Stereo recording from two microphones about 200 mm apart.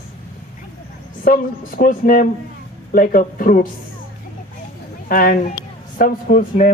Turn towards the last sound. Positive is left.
turn(degrees=45)  # may be behind; listen again after turning